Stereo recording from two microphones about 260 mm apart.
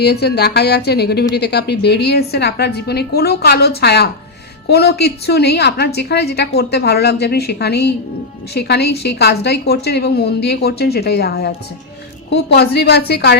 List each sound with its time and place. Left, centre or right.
0.0 s a woman's voice: left